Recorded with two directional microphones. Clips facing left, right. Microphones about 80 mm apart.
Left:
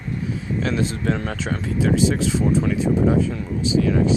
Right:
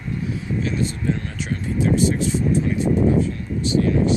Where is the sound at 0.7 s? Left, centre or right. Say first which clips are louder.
Left 1 dB; left.